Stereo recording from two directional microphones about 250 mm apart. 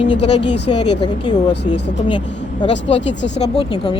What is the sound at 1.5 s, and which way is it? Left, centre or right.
Speech, left.